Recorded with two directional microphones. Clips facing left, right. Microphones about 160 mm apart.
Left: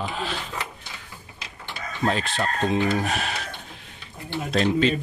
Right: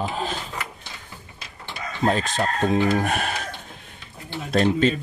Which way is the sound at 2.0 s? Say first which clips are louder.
Right 3 dB; 45° right (ahead or behind).